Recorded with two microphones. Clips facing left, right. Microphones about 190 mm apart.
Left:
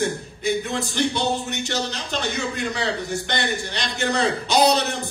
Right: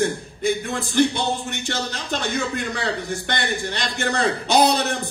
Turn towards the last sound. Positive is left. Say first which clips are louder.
# even
turn(degrees=-50)  # may be behind; listen again after turning